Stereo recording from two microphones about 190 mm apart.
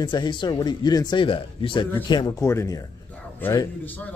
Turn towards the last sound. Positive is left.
turn(degrees=15)  # may be behind; listen again after turning